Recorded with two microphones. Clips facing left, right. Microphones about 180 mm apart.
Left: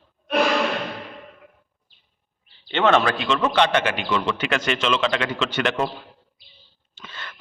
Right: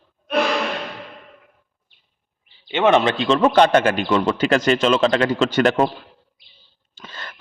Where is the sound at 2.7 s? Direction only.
10° right (ahead or behind); by 5.9 s 45° right (ahead or behind).